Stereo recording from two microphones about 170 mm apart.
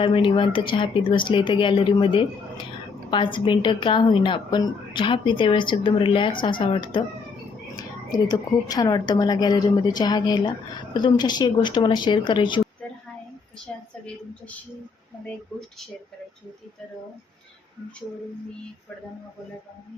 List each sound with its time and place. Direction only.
0.0 s a woman's voice: 30° left (ahead or behind)